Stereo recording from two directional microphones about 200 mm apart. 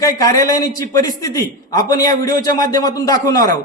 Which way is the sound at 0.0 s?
15° left (ahead or behind).